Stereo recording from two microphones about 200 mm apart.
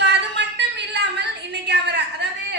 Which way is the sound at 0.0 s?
60° right (ahead or behind).